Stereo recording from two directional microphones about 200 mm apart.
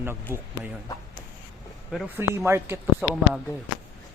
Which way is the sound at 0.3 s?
10° right (ahead or behind).